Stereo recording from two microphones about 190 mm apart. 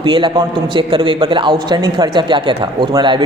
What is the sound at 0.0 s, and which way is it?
A man's voice, 25° right (ahead or behind).